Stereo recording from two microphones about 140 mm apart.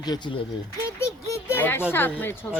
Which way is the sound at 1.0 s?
20° left (ahead or behind).